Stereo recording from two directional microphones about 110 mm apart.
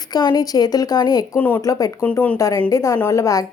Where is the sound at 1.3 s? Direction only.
15° left (ahead or behind).